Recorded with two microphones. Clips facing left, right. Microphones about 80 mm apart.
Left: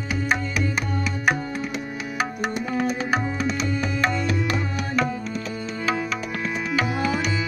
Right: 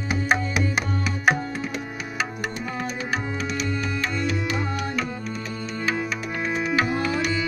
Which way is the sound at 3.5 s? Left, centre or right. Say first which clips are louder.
Left 2 dB; left.